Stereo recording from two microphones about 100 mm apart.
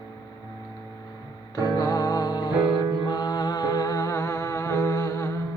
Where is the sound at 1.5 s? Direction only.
40° left (ahead or behind).